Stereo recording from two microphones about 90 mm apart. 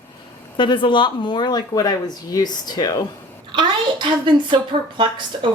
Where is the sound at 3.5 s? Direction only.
60° right (ahead or behind).